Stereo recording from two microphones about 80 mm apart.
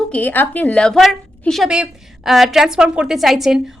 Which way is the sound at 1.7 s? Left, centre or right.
Centre.